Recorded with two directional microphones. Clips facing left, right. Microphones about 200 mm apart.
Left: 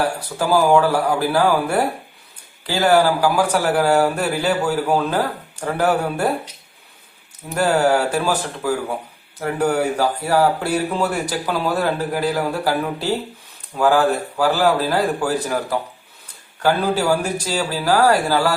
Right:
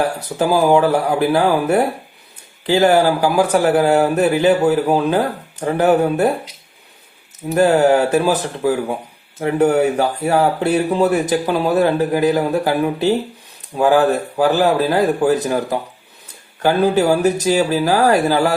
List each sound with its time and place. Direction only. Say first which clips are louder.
0.3 s speech: right 2 dB; 20° right (ahead or behind)
7.5 s speech: right 4 dB; 20° right (ahead or behind)